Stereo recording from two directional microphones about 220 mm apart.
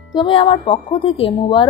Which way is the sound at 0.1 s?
20° left (ahead or behind).